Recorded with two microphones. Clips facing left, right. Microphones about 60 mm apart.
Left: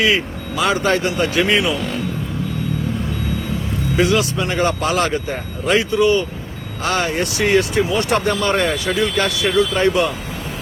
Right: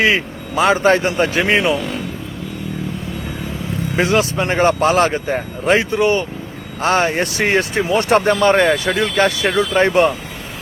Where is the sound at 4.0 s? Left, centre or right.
Right.